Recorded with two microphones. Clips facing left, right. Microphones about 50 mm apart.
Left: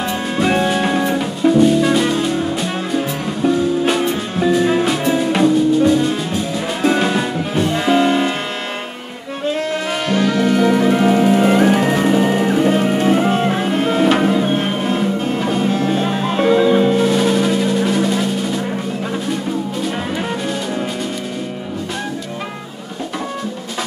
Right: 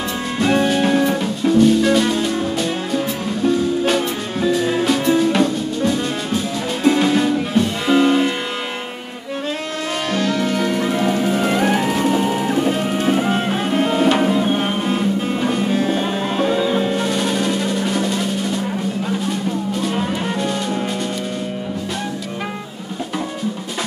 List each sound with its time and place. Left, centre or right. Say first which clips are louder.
0.4 s music: even; centre
3.8 s music: left 2 dB; centre
6.9 s music: right 3 dB; centre
10.0 s music: left 4 dB; centre
15.7 s music: left 1 dB; centre
16.1 s music: left 2 dB; centre
16.3 s music: left 6 dB; left
16.8 s music: left 5 dB; centre